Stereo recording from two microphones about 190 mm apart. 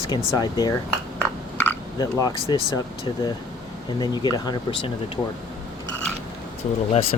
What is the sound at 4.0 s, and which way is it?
Speech, 20° left (ahead or behind).